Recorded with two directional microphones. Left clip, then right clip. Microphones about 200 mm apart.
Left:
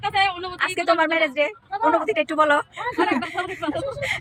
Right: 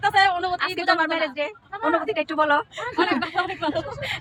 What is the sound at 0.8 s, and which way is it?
A woman's voice, 10° left (ahead or behind).